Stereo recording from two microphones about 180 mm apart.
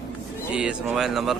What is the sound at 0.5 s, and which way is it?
Speech, 5° right (ahead or behind).